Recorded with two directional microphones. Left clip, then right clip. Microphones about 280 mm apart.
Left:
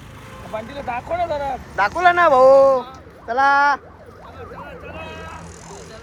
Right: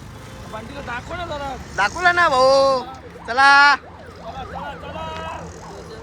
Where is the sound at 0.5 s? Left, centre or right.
Left.